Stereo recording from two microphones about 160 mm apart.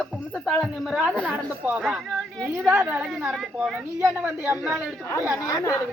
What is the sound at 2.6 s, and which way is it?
A woman's voice, 15° right (ahead or behind).